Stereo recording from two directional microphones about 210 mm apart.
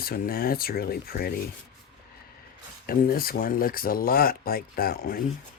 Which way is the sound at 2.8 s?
45° left (ahead or behind).